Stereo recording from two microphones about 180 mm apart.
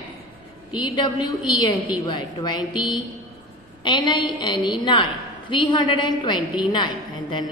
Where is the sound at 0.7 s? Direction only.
25° left (ahead or behind).